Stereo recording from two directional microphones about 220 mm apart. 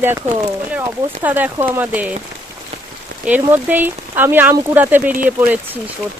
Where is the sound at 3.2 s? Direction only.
10° right (ahead or behind).